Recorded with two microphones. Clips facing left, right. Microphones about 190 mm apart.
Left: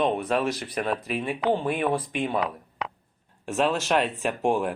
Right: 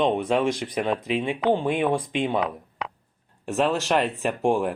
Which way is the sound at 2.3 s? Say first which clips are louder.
Right 2 dB; centre (ahead or behind).